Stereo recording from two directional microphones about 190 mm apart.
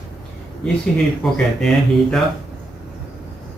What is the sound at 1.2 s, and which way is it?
Speech, centre (ahead or behind).